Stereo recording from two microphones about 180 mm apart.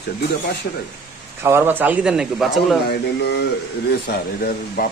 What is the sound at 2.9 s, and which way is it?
Speech, 65° left (ahead or behind).